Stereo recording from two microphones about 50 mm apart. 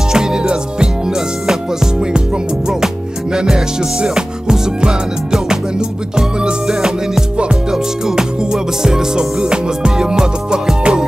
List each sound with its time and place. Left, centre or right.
0.1 s music: centre
3.3 s music: centre